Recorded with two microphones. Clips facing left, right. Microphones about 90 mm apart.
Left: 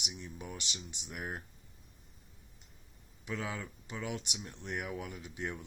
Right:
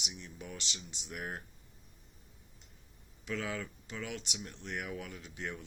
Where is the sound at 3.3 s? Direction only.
20° left (ahead or behind).